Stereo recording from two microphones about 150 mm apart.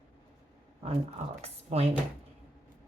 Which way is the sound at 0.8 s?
45° right (ahead or behind).